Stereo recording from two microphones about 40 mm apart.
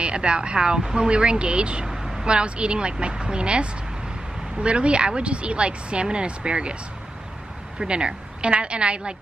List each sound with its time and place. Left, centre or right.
0.0 s speech: right
1.9 s vehicle: centre
2.2 s speech: right
7.8 s speech: right